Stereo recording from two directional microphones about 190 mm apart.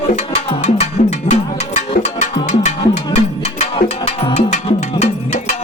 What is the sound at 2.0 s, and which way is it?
Music, 35° left (ahead or behind).